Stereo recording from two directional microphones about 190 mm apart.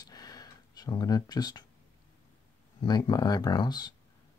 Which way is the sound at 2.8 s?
20° left (ahead or behind).